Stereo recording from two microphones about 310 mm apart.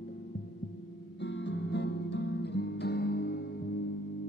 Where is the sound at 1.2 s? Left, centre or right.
Left.